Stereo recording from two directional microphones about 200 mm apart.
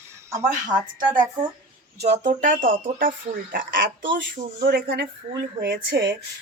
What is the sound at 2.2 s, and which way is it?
Speech, 45° right (ahead or behind).